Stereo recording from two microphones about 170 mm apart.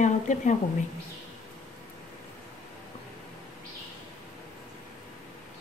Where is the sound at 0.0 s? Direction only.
45° left (ahead or behind).